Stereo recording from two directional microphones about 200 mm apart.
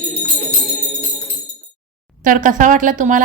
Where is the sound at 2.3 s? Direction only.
40° right (ahead or behind).